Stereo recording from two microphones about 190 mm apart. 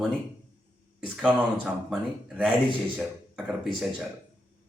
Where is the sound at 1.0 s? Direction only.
5° right (ahead or behind).